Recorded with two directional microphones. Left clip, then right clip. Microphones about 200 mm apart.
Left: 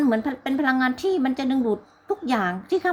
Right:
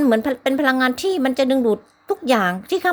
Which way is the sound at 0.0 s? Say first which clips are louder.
Right 6 dB; 50° right (ahead or behind).